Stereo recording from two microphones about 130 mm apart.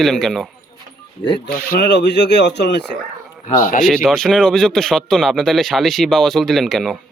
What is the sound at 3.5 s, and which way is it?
Speech, 90° left.